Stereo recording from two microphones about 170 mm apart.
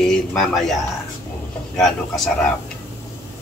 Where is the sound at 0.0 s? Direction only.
5° left (ahead or behind).